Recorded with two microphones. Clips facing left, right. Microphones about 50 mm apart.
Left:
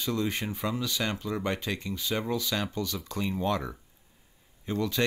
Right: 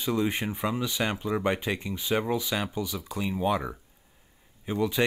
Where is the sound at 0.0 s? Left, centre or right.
Centre.